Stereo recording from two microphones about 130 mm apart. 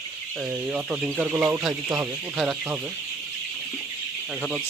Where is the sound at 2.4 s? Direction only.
10° right (ahead or behind).